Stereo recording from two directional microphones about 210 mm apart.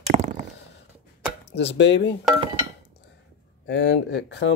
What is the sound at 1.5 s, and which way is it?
Speech, 55° left (ahead or behind).